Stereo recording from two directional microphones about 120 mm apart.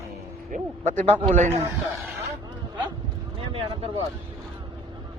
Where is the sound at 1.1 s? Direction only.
70° right (ahead or behind).